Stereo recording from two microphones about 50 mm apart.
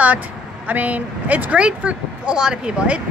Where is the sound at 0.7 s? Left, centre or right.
Right.